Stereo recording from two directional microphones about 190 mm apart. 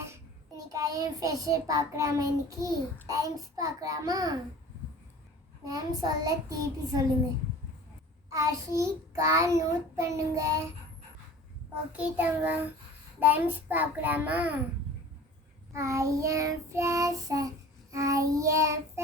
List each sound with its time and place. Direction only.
0.0 s a child's voice: 15° right (ahead or behind)
5.6 s a child's voice: 20° right (ahead or behind)
8.3 s child singing: 15° right (ahead or behind)
11.9 s child singing: 10° right (ahead or behind)
15.7 s child singing: 15° right (ahead or behind)